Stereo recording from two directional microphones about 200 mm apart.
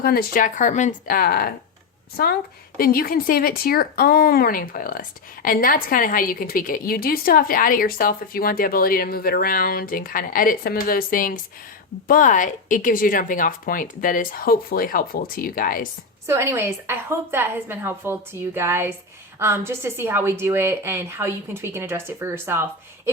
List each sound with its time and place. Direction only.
0.0 s speech: 50° left (ahead or behind)
16.2 s a woman's voice: 15° right (ahead or behind)